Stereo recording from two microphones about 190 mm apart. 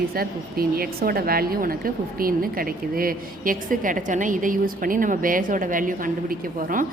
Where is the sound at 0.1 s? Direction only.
50° right (ahead or behind).